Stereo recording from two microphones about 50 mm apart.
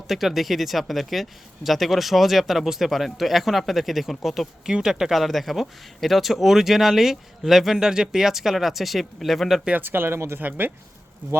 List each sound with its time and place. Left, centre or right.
0.1 s speech: centre
9.8 s speech: right
10.2 s speech: right